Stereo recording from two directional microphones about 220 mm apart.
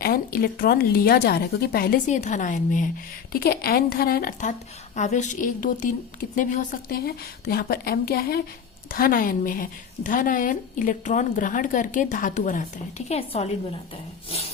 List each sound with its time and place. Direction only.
0.0 s a woman's voice: 40° left (ahead or behind)